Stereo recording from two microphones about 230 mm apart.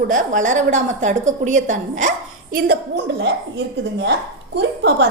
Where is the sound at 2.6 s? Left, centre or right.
Right.